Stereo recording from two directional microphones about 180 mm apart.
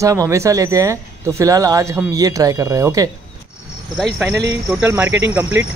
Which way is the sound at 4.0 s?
Centre (ahead or behind).